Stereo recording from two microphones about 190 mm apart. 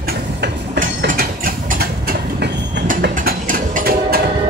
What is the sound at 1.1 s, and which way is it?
Mechanisms, 50° right (ahead or behind).